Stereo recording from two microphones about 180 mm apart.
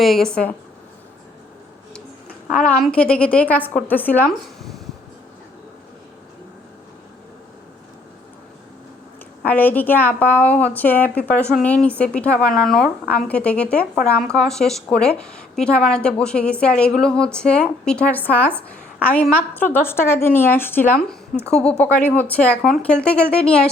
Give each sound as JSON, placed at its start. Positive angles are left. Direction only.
{"t": 0.0, "sound": "a woman's voice", "side_deg": 0}
{"t": 2.5, "sound": "a woman's voice", "side_deg": 5}
{"t": 9.4, "sound": "a woman's voice", "side_deg": 10}